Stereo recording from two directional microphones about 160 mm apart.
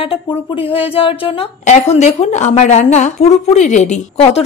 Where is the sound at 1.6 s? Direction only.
45° left (ahead or behind).